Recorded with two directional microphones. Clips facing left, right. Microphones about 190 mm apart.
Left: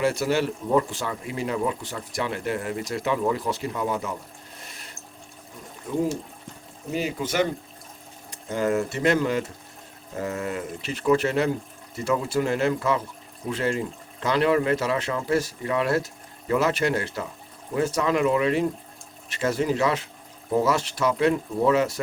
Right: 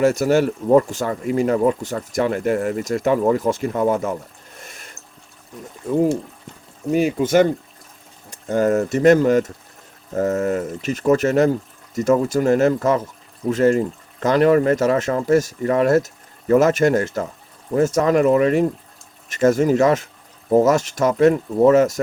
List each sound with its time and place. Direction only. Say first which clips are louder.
0.0 s speech: right 7 dB; 45° right (ahead or behind)
6.9 s speech: right 9 dB; 55° right (ahead or behind)